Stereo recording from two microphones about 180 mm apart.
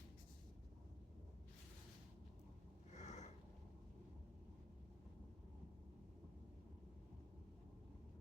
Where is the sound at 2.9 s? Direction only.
40° left (ahead or behind).